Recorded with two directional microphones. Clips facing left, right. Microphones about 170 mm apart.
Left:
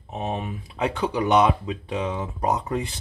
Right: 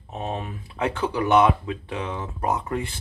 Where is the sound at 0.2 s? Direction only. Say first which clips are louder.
Left 1 dB; 15° left (ahead or behind).